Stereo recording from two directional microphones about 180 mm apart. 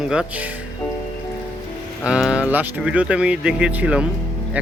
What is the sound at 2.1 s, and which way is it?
Speech, 5° right (ahead or behind).